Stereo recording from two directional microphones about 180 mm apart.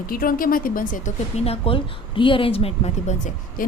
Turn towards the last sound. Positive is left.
turn(degrees=40)  # may be behind; listen again after turning